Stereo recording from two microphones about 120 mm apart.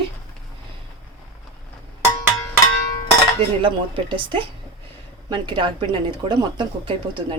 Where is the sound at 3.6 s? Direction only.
40° right (ahead or behind).